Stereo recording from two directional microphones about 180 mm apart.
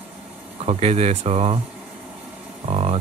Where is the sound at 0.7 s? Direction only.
35° right (ahead or behind).